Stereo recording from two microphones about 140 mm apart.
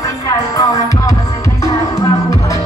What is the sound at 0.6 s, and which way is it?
Music, 25° left (ahead or behind).